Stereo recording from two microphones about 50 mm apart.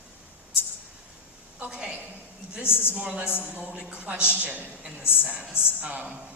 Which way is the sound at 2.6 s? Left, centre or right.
Left.